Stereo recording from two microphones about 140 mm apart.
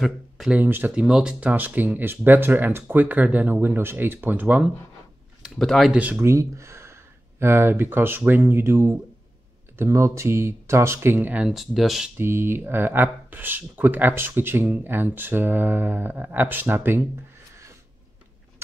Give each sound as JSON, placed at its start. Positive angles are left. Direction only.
{"t": 0.0, "sound": "speech", "side_deg": 0}
{"t": 0.6, "sound": "speech", "side_deg": -15}
{"t": 5.4, "sound": "speech", "side_deg": 0}
{"t": 5.9, "sound": "speech", "side_deg": -10}
{"t": 12.2, "sound": "speech", "side_deg": -15}